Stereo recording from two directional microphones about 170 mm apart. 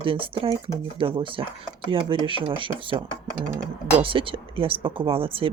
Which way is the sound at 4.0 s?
30° right (ahead or behind).